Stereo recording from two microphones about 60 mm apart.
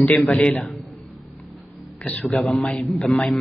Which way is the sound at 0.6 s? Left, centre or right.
Centre.